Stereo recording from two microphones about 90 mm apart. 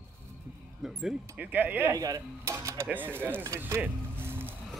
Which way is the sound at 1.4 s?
20° right (ahead or behind).